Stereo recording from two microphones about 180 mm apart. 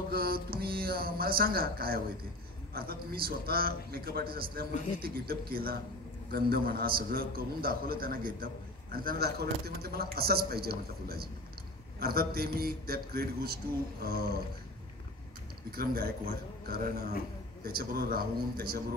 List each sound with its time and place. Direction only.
0.1 s a man's voice: 55° right (ahead or behind)
15.7 s a man's voice: 55° right (ahead or behind)